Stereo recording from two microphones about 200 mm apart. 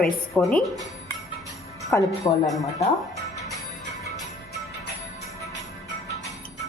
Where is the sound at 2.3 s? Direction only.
20° left (ahead or behind).